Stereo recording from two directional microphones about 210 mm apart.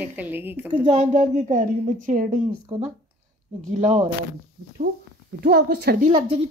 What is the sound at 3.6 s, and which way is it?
Speech, 35° right (ahead or behind).